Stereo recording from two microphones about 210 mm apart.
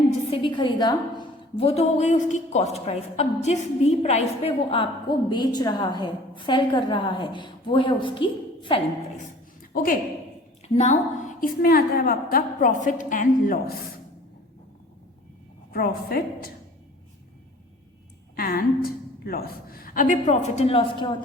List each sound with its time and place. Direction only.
0.3 s a woman's voice: 20° left (ahead or behind)
9.6 s a sound: 40° left (ahead or behind)
10.6 s a sound: 30° left (ahead or behind)
11.3 s a woman's voice: 45° left (ahead or behind)
15.7 s a woman's voice: 45° left (ahead or behind)
18.3 s a woman's voice: 45° left (ahead or behind); by 21.1 s 25° left (ahead or behind)